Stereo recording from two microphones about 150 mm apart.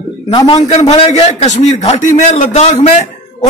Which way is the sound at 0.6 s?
45° left (ahead or behind).